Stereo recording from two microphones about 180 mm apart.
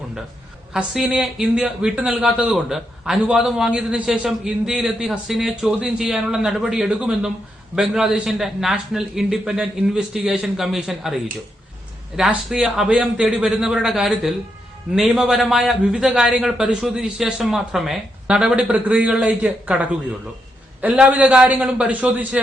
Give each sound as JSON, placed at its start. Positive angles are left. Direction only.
{"t": 0.7, "sound": "a man's voice", "side_deg": -5}